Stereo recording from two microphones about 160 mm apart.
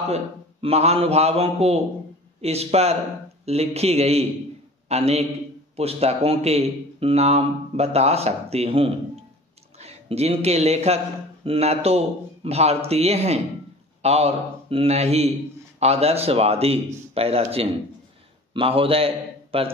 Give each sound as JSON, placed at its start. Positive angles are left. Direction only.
{"t": 0.1, "sound": "a man's voice", "side_deg": -40}